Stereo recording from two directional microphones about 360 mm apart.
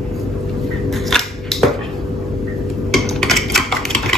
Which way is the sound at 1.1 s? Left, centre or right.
Centre.